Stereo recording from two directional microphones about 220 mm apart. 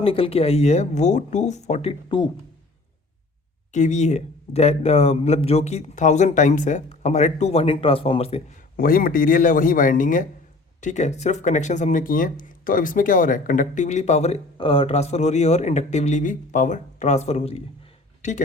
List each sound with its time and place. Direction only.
0.0 s speech: 25° left (ahead or behind)
3.7 s speech: 30° left (ahead or behind)
8.7 s speech: 40° left (ahead or behind)